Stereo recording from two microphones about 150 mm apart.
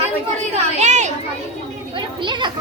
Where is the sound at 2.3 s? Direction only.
30° right (ahead or behind).